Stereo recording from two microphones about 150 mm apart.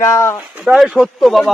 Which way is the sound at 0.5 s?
5° right (ahead or behind).